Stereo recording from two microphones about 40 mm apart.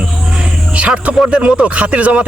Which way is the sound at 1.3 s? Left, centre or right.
Right.